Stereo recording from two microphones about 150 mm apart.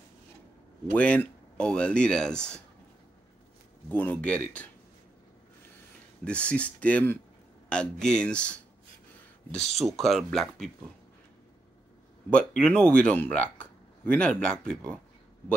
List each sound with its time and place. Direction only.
0.9 s speech: 10° left (ahead or behind)
3.9 s speech: 10° left (ahead or behind)
6.2 s speech: 10° left (ahead or behind)
9.8 s speech: centre (ahead or behind)
12.3 s speech: 5° left (ahead or behind)